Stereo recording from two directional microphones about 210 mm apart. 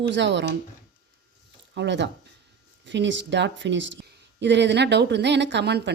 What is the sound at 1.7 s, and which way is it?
Speech, 60° right (ahead or behind).